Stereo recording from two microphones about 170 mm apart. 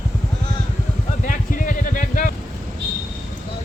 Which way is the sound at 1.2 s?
50° left (ahead or behind).